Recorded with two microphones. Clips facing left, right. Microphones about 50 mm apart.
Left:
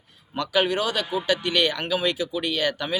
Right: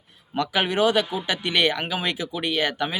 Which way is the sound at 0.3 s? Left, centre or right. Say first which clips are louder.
Right 1 dB; right.